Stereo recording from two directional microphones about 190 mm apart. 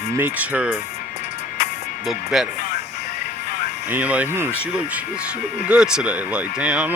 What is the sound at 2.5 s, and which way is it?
Music, 45° left (ahead or behind).